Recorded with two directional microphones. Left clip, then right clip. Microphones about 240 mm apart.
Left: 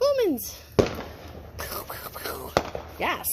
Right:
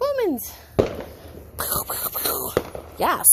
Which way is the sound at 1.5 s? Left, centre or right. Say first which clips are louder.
Right 7 dB; right.